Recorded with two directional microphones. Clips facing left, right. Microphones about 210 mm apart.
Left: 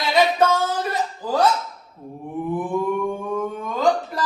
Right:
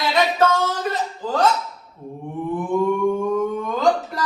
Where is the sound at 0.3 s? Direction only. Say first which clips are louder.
Even; 10° left (ahead or behind).